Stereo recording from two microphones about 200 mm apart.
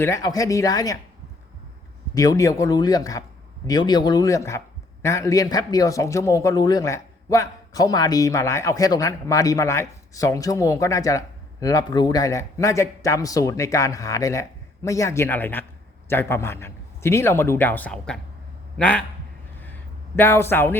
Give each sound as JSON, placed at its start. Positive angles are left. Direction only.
{"t": 0.0, "sound": "speech", "side_deg": 15}
{"t": 2.1, "sound": "a man's voice", "side_deg": 15}
{"t": 19.6, "sound": "a sound", "side_deg": 10}